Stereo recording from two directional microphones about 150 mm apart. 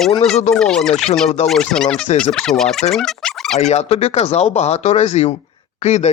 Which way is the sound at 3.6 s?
45° left (ahead or behind).